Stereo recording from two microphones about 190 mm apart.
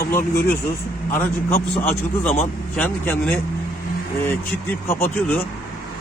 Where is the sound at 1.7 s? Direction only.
10° left (ahead or behind).